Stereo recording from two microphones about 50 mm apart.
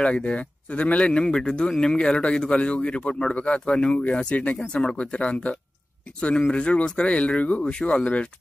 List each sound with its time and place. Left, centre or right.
0.0 s speech: left